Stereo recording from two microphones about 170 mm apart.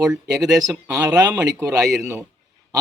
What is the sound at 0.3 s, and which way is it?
Speech, 20° right (ahead or behind).